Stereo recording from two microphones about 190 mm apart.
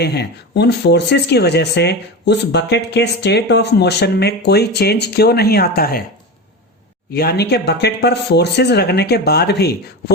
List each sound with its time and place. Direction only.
0.0 s speech: 60° left (ahead or behind)
7.1 s speech: 55° left (ahead or behind)